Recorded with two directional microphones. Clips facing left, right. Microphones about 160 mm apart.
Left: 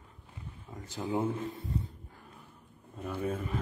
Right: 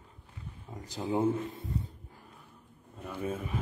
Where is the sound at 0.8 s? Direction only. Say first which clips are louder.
Right 3 dB; 35° right (ahead or behind).